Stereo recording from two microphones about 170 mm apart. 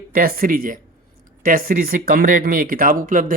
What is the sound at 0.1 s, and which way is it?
Speech, 60° right (ahead or behind).